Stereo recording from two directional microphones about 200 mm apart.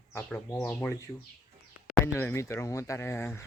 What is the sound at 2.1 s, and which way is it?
Speech, 15° left (ahead or behind).